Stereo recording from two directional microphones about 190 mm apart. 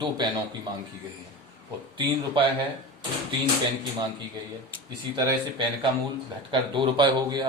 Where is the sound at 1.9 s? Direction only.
25° right (ahead or behind).